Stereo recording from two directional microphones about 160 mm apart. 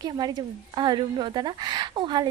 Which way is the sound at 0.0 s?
25° right (ahead or behind).